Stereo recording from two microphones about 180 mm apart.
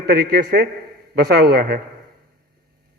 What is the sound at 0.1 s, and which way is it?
A man's voice, 60° right (ahead or behind).